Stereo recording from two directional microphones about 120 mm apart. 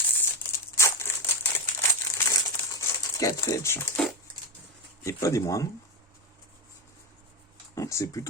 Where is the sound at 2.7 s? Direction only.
25° left (ahead or behind).